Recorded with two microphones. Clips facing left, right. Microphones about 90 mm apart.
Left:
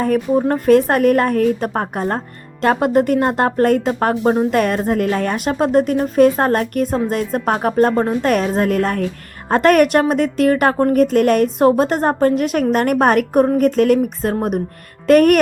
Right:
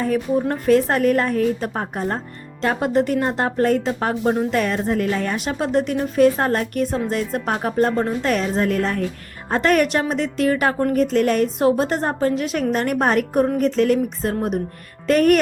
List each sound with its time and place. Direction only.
0.0 s a woman's voice: 50° left (ahead or behind)